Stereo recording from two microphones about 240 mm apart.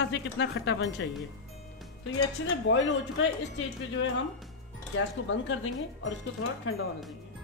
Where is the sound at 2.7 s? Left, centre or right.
Left.